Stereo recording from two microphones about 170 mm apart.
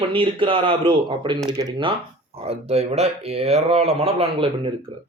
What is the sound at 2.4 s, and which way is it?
Speech, 35° right (ahead or behind).